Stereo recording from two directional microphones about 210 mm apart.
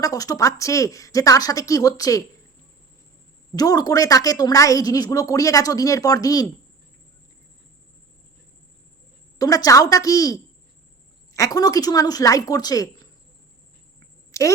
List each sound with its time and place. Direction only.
0.0 s a woman's voice: 15° left (ahead or behind)
3.5 s a woman's voice: 15° left (ahead or behind)
9.4 s a woman's voice: 15° left (ahead or behind)
14.3 s a sound: 15° left (ahead or behind)